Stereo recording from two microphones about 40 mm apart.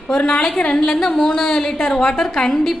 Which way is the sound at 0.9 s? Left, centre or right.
Centre.